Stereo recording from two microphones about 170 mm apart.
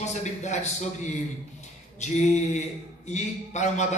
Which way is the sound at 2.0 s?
45° left (ahead or behind).